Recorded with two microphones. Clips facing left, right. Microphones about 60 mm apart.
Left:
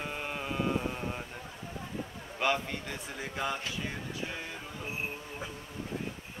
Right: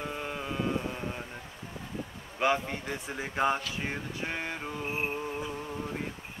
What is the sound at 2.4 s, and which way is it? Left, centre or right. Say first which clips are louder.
Speech: right 3 dB; right.